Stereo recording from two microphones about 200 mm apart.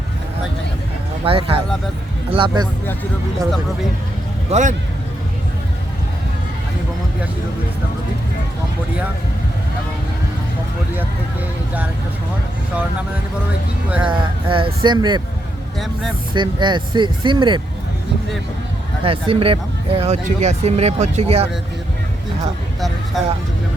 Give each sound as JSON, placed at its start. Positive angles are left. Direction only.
{"t": 1.2, "sound": "speech", "side_deg": -30}
{"t": 4.5, "sound": "speech", "side_deg": -30}
{"t": 14.1, "sound": "speech", "side_deg": -25}
{"t": 16.3, "sound": "speech", "side_deg": -25}
{"t": 19.0, "sound": "speech", "side_deg": -25}